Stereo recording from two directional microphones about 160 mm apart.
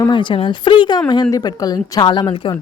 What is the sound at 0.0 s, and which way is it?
Speech, 30° left (ahead or behind).